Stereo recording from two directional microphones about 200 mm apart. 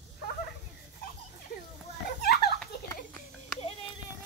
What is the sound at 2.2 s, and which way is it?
Children playing, 50° left (ahead or behind).